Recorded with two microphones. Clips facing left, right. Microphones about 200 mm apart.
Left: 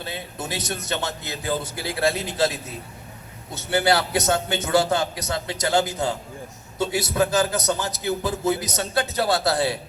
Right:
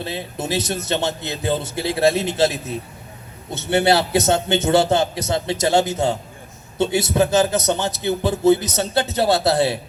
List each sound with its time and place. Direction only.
0.0 s a man's voice: 25° right (ahead or behind)